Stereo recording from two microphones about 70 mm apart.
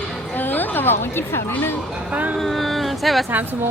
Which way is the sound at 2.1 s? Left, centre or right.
Right.